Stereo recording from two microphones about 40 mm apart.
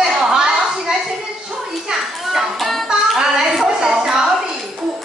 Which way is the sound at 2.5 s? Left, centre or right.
Centre.